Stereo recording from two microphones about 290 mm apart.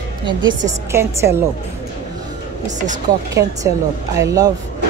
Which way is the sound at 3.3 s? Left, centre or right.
Centre.